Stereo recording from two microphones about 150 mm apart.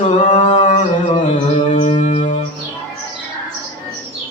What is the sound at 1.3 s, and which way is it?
Music, 50° left (ahead or behind).